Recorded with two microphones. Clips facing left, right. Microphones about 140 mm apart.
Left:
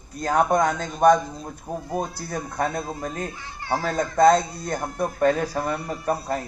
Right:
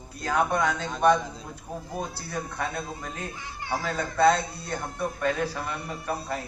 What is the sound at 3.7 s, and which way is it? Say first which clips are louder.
Speech: left 5 dB; 40° left (ahead or behind).